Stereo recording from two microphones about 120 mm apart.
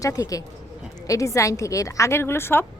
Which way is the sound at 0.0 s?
30° left (ahead or behind).